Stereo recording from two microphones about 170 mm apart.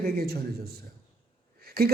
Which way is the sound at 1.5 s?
65° right (ahead or behind).